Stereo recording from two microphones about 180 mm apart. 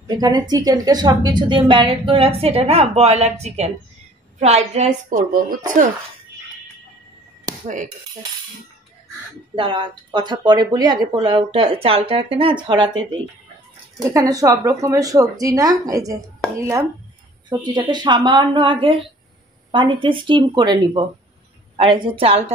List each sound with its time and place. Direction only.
0.0 s a woman's voice: 25° right (ahead or behind); by 5.6 s 50° right (ahead or behind)
7.6 s cutlery: 45° right (ahead or behind)
9.6 s a woman's voice: 25° right (ahead or behind)
14.1 s a woman's voice: 20° right (ahead or behind)